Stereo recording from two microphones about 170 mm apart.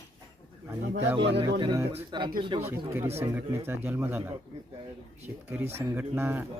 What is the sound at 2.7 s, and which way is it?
Speech, 15° right (ahead or behind).